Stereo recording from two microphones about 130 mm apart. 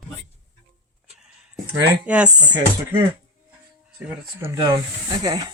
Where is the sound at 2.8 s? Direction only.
20° right (ahead or behind).